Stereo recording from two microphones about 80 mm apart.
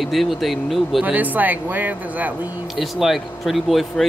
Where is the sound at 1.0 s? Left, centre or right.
Right.